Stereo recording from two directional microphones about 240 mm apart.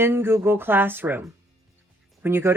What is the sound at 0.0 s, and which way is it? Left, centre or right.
Speech, centre.